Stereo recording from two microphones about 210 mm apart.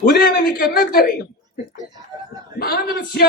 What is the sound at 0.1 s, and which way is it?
A man's voice, 50° left (ahead or behind).